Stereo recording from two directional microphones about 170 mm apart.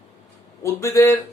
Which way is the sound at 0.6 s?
15° left (ahead or behind).